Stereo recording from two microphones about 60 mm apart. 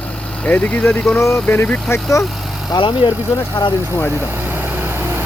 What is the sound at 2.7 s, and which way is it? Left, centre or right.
Speech, left.